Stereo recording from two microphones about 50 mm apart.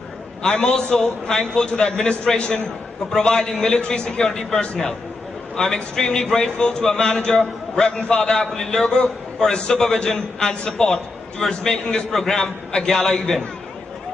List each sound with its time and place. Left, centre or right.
0.4 s a man's voice: centre